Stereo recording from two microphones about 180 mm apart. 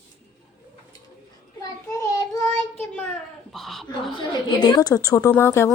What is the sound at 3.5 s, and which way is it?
Speech, centre (ahead or behind).